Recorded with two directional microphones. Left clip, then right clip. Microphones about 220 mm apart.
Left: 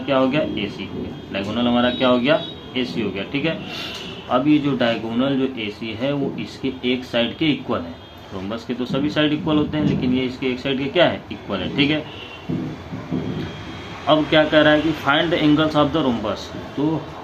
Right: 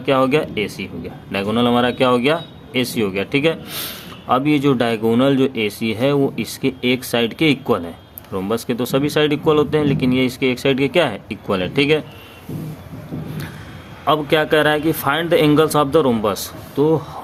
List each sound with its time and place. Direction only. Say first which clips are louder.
0.0 s speech: right 3 dB; 60° right (ahead or behind)
14.1 s speech: even; 60° right (ahead or behind)